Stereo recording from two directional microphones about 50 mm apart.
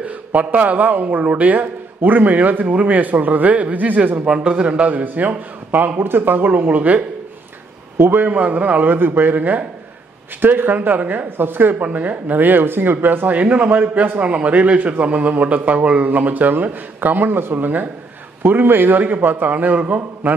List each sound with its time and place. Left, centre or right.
0.0 s speech: right
4.3 s speech: right
8.0 s speech: right